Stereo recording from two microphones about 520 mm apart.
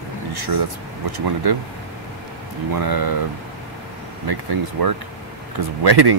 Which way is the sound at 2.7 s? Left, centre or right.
Right.